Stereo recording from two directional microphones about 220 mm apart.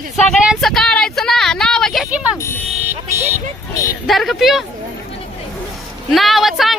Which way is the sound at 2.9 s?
10° right (ahead or behind).